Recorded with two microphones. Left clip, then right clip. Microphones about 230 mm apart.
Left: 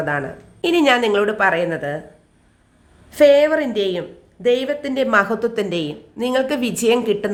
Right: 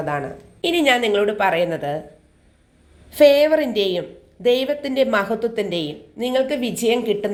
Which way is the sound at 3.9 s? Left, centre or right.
Centre.